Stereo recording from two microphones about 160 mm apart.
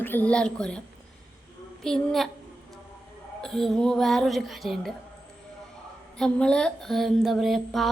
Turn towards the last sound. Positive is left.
turn(degrees=0)  # may be behind; listen again after turning